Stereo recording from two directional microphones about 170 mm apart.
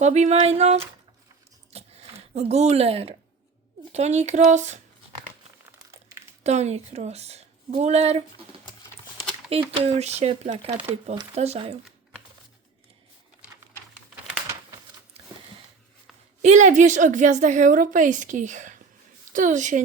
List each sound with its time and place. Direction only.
0.0 s speech: 40° right (ahead or behind)
1.7 s a sound: 35° right (ahead or behind)
3.9 s a woman's voice: 40° right (ahead or behind)
5.9 s a sound: 15° right (ahead or behind)
6.4 s speech: 40° right (ahead or behind)
9.5 s speech: 35° right (ahead or behind)
16.4 s a woman's voice: 45° right (ahead or behind)